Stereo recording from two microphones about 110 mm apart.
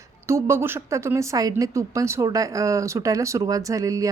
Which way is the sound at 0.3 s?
25° right (ahead or behind).